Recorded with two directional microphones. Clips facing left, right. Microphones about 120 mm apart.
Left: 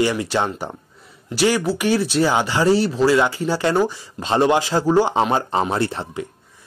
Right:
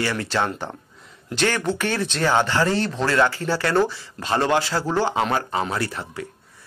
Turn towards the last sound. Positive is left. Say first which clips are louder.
# left 5 dB
turn(degrees=25)  # may be behind; listen again after turning